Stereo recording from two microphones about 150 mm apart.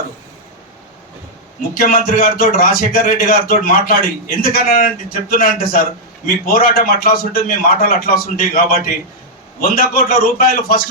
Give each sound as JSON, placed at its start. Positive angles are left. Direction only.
{"t": 1.7, "sound": "a man's voice", "side_deg": 70}